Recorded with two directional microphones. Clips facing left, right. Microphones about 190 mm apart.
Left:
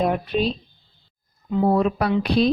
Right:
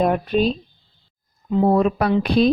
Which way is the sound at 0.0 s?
50° right (ahead or behind).